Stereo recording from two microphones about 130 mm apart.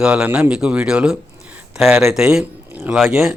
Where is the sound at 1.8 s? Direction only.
20° right (ahead or behind).